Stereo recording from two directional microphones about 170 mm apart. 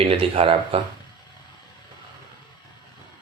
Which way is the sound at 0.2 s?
35° right (ahead or behind).